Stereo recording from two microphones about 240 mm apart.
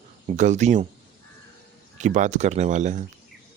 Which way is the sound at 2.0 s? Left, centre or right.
Right.